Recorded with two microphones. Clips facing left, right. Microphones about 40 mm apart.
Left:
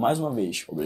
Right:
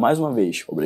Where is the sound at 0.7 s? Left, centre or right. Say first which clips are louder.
Right 5 dB; centre.